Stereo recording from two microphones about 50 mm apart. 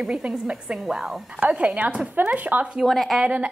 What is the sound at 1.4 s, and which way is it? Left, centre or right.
A woman's voice, right.